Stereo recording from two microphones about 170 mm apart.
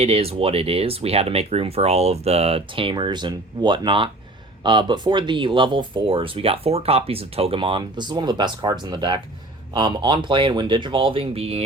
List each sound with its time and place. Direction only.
0.0 s speech: 35° right (ahead or behind)